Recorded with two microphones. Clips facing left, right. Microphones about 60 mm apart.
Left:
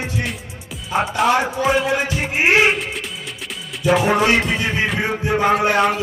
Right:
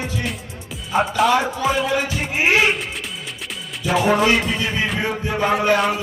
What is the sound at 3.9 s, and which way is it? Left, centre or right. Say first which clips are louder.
Music: left 1 dB; centre.